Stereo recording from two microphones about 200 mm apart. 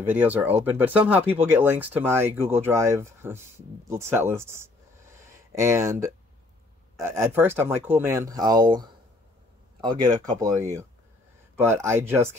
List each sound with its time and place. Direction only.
0.0 s speech: 10° right (ahead or behind)
5.1 s a sound: 15° right (ahead or behind)
7.0 s speech: 15° right (ahead or behind)